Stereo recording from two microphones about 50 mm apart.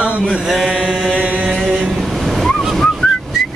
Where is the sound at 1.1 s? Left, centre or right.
Right.